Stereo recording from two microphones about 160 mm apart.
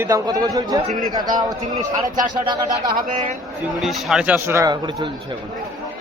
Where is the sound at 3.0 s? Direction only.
55° right (ahead or behind).